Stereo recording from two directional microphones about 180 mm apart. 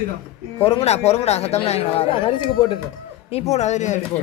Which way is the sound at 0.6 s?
35° left (ahead or behind).